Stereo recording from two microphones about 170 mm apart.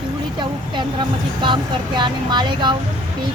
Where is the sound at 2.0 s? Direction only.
25° right (ahead or behind).